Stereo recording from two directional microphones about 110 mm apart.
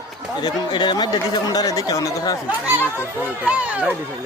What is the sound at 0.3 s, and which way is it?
Speech, 45° left (ahead or behind).